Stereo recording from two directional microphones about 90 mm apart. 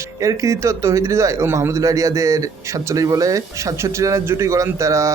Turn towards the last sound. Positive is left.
turn(degrees=-35)  # may be behind; listen again after turning